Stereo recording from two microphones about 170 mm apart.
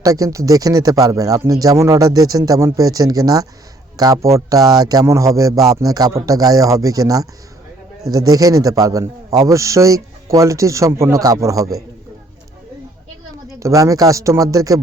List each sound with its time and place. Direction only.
0.0 s a man's voice: 20° right (ahead or behind)
13.6 s a man's voice: 20° right (ahead or behind)